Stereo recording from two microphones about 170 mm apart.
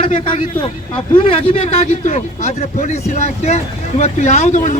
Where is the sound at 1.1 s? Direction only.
35° left (ahead or behind).